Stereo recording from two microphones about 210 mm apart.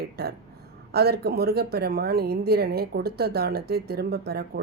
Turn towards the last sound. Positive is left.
turn(degrees=-50)  # may be behind; listen again after turning